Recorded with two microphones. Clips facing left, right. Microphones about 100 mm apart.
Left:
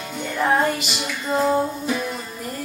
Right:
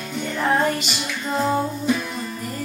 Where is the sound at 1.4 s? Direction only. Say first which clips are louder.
Left 2 dB; 5° left (ahead or behind).